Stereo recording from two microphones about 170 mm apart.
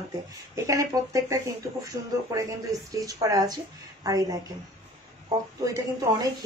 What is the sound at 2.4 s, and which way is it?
Speech, 20° right (ahead or behind).